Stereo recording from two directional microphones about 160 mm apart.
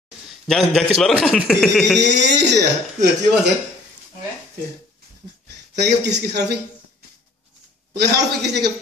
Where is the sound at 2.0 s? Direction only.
90° right.